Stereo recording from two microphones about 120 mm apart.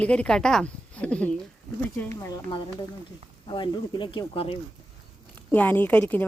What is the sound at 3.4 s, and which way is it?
Speech, 40° left (ahead or behind).